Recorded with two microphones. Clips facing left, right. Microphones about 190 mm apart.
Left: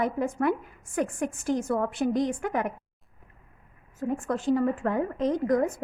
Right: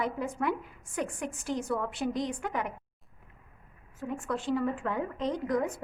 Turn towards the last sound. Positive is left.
turn(degrees=45)  # may be behind; listen again after turning